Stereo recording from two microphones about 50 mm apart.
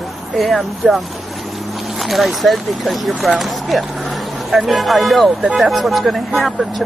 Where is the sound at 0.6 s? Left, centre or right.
Centre.